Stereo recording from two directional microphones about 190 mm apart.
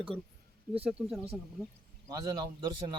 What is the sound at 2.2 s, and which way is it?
Speech, 20° right (ahead or behind).